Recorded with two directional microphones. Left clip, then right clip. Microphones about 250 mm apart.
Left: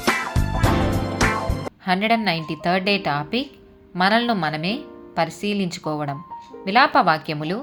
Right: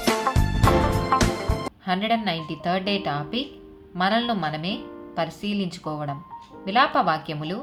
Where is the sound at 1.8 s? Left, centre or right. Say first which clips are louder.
Left 5 dB; left.